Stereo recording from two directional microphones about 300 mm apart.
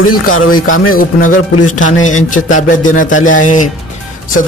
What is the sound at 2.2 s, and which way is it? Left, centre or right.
Speech, left.